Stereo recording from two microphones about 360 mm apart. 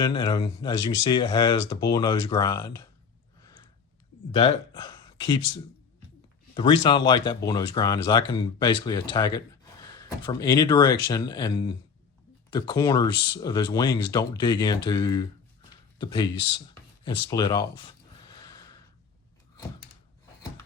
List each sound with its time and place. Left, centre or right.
0.0 s speech: centre
4.4 s speech: centre
18.3 s gasp: centre